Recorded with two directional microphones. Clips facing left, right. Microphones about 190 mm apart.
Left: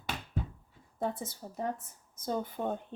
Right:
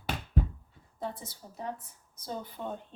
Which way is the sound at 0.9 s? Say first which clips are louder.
Left 4 dB; 50° left (ahead or behind).